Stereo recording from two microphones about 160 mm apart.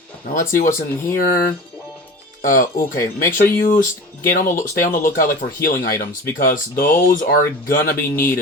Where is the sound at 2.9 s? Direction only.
15° left (ahead or behind).